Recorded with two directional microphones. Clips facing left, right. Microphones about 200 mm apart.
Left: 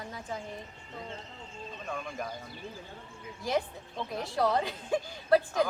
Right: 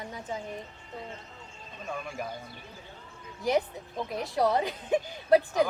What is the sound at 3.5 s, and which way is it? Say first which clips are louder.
Speech: right 4 dB; 15° right (ahead or behind).